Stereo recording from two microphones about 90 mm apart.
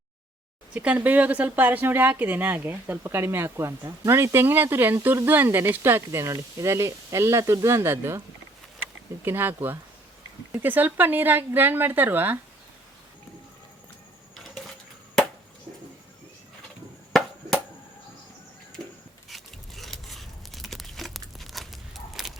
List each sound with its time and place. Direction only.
0.7 s speech: 15° right (ahead or behind)
9.2 s speech: 25° right (ahead or behind)
17.1 s chop: 5° left (ahead or behind)
19.3 s tearing: centre (ahead or behind)